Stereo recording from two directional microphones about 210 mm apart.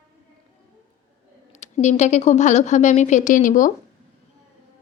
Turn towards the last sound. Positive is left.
turn(degrees=40)  # may be behind; listen again after turning